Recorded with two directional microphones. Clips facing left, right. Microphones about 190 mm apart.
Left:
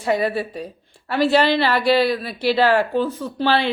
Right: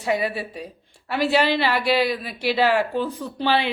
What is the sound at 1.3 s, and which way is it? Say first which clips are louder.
Speech: left 2 dB; 15° right (ahead or behind).